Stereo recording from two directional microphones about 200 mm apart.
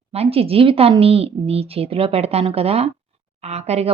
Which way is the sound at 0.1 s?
30° right (ahead or behind).